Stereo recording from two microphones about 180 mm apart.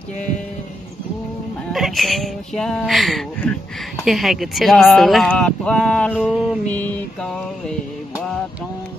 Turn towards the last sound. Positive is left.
turn(degrees=5)  # may be behind; listen again after turning